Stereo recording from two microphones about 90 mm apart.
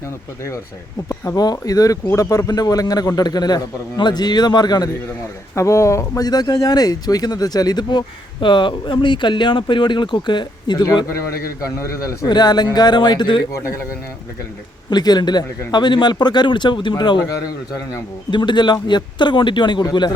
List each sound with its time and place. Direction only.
1.0 s speech: 30° left (ahead or behind)
1.4 s a man's voice: 45° left (ahead or behind)
5.5 s speech: 35° left (ahead or behind)
6.2 s speech: 50° left (ahead or behind)
11.8 s speech: 35° left (ahead or behind)
12.3 s a man's voice: 50° left (ahead or behind)
14.8 s speech: 50° left (ahead or behind)
18.3 s speech: 60° left (ahead or behind)